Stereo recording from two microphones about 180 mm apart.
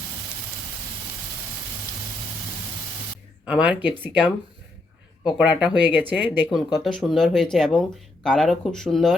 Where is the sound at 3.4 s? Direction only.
10° right (ahead or behind).